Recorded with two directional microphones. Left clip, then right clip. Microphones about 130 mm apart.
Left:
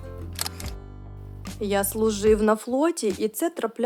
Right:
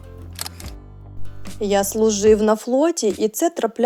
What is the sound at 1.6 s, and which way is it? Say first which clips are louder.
A woman's voice: right 6 dB; 25° right (ahead or behind).